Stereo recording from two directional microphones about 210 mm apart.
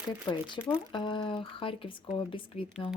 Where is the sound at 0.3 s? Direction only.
20° left (ahead or behind).